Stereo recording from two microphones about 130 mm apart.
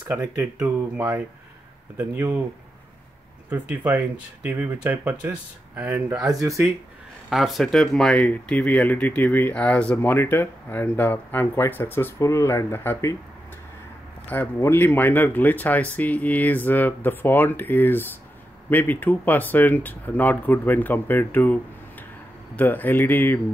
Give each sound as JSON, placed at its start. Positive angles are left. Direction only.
{"t": 0.2, "sound": "speech", "side_deg": -20}
{"t": 3.4, "sound": "speech", "side_deg": -10}
{"t": 7.2, "sound": "speech", "side_deg": 0}
{"t": 14.2, "sound": "speech", "side_deg": 15}
{"t": 22.6, "sound": "speech", "side_deg": 15}